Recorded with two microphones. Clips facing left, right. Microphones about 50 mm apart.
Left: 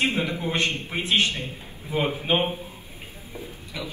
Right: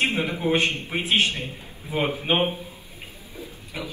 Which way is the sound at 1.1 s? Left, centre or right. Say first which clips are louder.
Right 1 dB; right.